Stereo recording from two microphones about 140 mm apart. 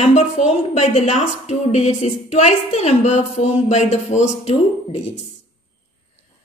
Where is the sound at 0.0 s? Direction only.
55° left (ahead or behind).